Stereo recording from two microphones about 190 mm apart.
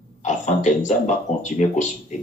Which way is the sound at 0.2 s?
40° left (ahead or behind).